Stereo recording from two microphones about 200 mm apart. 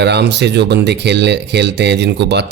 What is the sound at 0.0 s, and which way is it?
Speech, 55° right (ahead or behind).